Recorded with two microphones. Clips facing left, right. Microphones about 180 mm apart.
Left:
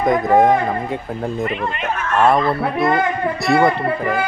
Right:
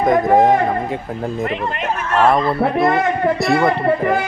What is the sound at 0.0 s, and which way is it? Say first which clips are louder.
Speech: right 1 dB; centre (ahead or behind).